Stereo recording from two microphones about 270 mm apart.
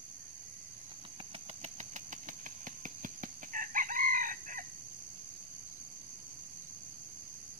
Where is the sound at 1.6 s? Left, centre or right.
Right.